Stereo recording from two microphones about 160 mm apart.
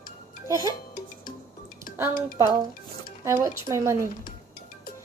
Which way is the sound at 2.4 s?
25° right (ahead or behind).